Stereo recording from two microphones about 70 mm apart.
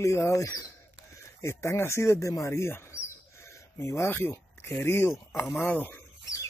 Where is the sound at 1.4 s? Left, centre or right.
Left.